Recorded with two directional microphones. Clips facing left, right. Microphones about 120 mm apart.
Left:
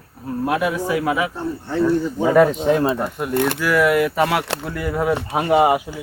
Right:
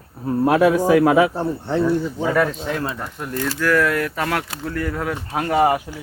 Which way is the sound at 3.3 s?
65° left (ahead or behind).